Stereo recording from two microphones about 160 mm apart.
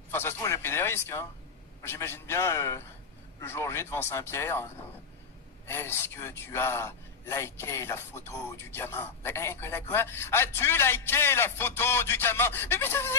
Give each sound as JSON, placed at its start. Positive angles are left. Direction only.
{"t": 0.1, "sound": "a man's voice", "side_deg": 15}